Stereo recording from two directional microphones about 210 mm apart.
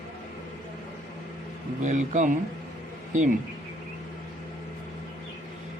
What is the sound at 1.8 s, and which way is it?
Speech, 35° right (ahead or behind).